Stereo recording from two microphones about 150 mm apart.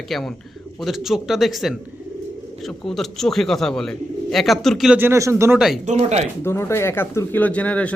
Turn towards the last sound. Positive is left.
turn(degrees=10)  # may be behind; listen again after turning